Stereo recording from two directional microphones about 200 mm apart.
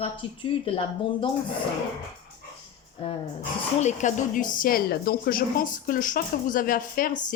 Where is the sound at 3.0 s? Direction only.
25° left (ahead or behind).